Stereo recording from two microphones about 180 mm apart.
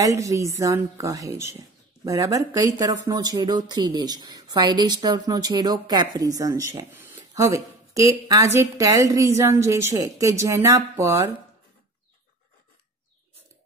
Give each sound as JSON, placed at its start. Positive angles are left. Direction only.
{"t": 0.0, "sound": "a woman's voice", "side_deg": -20}